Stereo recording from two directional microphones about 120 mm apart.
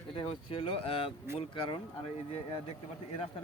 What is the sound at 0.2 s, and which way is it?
Speech, 50° left (ahead or behind).